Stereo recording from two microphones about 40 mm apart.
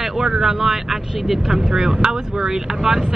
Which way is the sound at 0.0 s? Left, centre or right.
Centre.